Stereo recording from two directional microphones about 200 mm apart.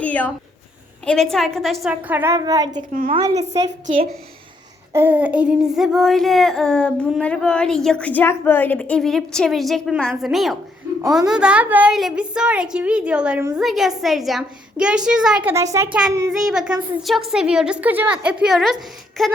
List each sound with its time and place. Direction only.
0.0 s speech: 5° left (ahead or behind)
1.0 s a sound: centre (ahead or behind); by 2.6 s 20° right (ahead or behind)
2.7 s a woman's voice: 40° right (ahead or behind)
3.2 s a woman's voice: 15° right (ahead or behind)
3.8 s a woman's voice: 40° right (ahead or behind)
4.9 s a sound: 10° right (ahead or behind)